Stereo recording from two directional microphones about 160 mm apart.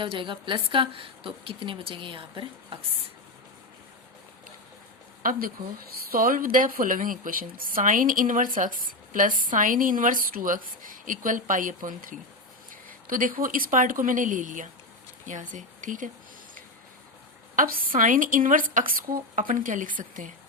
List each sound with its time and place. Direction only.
0.0 s a woman's voice: 30° right (ahead or behind)
5.2 s a woman's voice: 60° right (ahead or behind)
17.6 s a woman's voice: 65° right (ahead or behind)